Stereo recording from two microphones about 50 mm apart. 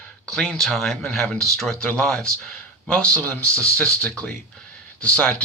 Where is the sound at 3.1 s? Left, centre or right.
Left.